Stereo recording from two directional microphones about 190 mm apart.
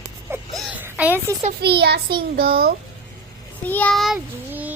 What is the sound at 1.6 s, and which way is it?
A child's voice, 60° right (ahead or behind).